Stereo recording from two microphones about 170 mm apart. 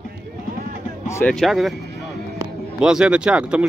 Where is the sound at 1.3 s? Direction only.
Centre (ahead or behind).